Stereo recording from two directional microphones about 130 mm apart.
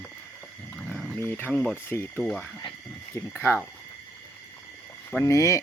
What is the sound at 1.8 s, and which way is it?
Speech, 20° left (ahead or behind).